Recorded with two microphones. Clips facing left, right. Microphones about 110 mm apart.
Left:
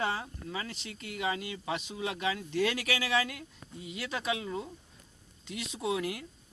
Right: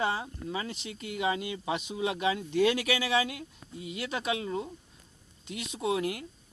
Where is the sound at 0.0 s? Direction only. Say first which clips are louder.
Right 3 dB; 20° right (ahead or behind).